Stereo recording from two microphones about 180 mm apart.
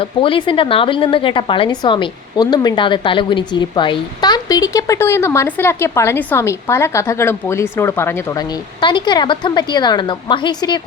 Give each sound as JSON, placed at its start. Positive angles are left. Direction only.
{"t": 0.0, "sound": "a woman's voice", "side_deg": 30}
{"t": 8.8, "sound": "a woman's voice", "side_deg": 25}